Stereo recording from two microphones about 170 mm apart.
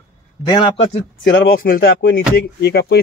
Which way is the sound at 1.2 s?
75° left (ahead or behind).